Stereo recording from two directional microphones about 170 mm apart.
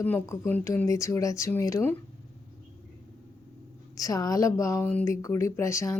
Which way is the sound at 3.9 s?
20° left (ahead or behind).